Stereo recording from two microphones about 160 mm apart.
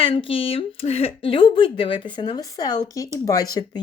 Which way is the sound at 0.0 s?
35° left (ahead or behind).